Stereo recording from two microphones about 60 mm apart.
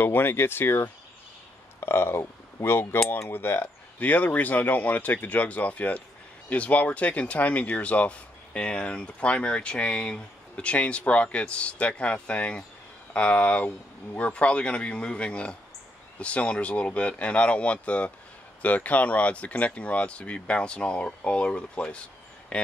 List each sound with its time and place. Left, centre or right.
0.0 s speech: left; by 22.7 s centre